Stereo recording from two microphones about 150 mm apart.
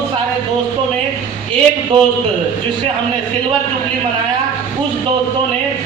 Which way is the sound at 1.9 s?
35° right (ahead or behind).